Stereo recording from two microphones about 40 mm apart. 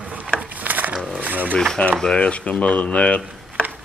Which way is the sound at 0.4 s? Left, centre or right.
Right.